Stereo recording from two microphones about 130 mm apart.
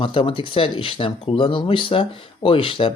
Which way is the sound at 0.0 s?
45° left (ahead or behind).